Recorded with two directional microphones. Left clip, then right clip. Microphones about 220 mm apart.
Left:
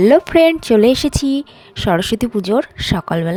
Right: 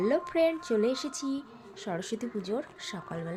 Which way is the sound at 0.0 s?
45° left (ahead or behind).